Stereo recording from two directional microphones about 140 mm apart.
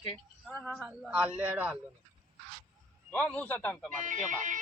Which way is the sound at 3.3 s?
10° left (ahead or behind).